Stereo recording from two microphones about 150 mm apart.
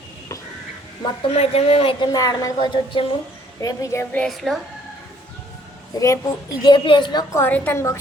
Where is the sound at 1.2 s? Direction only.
45° left (ahead or behind); by 4.2 s 20° left (ahead or behind).